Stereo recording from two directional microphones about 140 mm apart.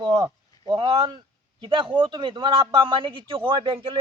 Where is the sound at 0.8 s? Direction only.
40° right (ahead or behind).